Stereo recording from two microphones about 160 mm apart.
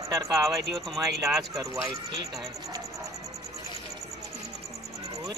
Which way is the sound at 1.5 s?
20° right (ahead or behind).